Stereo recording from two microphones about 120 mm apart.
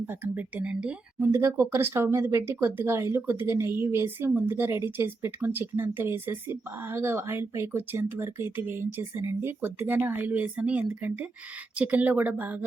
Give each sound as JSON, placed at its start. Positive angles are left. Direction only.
{"t": 0.0, "sound": "speech", "side_deg": -15}
{"t": 1.2, "sound": "speech", "side_deg": -25}